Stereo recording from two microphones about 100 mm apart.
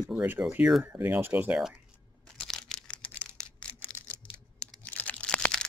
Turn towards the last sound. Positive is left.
turn(degrees=10)  # may be behind; listen again after turning